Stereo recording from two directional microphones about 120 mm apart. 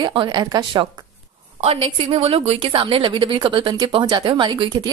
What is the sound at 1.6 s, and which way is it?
A woman's voice, 55° right (ahead or behind).